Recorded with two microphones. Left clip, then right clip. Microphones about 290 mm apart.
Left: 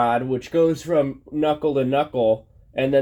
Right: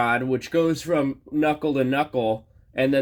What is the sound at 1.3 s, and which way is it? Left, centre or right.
Speech, right.